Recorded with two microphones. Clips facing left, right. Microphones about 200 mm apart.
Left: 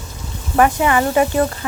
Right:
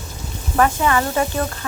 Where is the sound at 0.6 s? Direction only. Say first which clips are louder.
Left 3 dB; 10° left (ahead or behind).